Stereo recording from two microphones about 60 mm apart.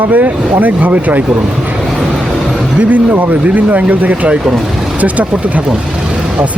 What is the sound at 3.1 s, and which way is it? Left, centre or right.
Speech, right.